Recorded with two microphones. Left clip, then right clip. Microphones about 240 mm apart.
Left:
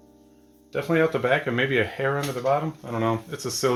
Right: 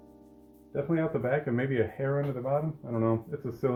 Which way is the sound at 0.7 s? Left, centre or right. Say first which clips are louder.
Left 7 dB; left.